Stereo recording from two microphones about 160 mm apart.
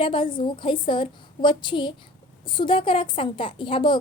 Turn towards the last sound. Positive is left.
turn(degrees=30)  # may be behind; listen again after turning